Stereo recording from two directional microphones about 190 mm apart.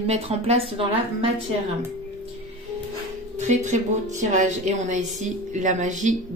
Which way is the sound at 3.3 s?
40° right (ahead or behind).